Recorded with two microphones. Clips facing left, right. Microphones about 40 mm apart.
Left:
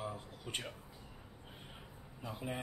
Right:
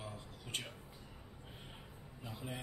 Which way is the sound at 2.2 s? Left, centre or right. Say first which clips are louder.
Left 5 dB; centre.